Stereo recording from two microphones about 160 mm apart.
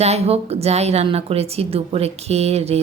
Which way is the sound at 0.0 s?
40° right (ahead or behind).